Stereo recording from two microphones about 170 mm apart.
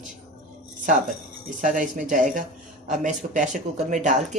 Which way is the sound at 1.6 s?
50° right (ahead or behind).